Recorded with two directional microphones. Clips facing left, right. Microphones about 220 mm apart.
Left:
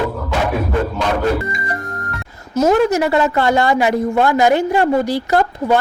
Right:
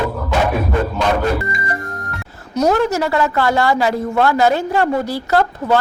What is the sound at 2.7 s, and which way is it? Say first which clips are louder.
A woman's voice: left 2 dB; 20° left (ahead or behind).